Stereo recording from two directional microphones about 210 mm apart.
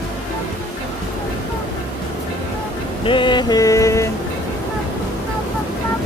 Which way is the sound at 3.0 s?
25° left (ahead or behind).